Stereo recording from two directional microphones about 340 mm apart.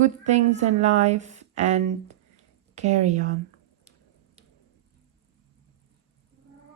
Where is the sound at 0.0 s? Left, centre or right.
Right.